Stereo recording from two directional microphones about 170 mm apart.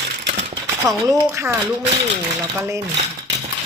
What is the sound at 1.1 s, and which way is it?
Speech, 15° right (ahead or behind).